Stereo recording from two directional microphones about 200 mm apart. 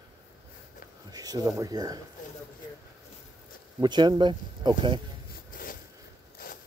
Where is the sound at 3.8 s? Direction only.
20° right (ahead or behind).